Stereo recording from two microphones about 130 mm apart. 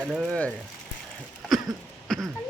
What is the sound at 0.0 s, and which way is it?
Speech, 5° right (ahead or behind).